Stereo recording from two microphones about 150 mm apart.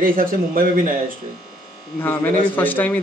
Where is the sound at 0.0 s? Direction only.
65° right (ahead or behind).